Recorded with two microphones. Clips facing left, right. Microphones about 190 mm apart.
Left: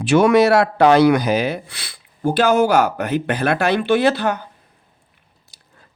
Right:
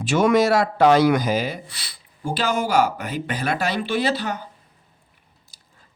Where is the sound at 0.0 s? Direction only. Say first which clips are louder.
Left 4 dB; 65° left (ahead or behind).